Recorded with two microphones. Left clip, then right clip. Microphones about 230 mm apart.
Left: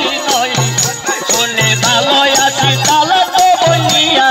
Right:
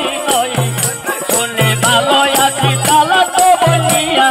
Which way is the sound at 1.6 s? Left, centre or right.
Left.